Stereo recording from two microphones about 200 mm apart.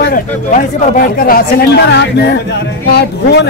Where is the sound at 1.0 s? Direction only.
45° left (ahead or behind).